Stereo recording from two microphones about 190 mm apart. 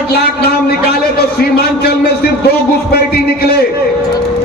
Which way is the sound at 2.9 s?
55° left (ahead or behind).